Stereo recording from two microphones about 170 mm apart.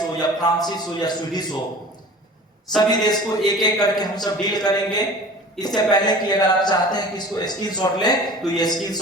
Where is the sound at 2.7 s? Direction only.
25° left (ahead or behind).